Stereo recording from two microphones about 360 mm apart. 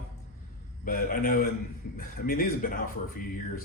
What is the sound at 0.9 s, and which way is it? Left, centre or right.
Speech, left.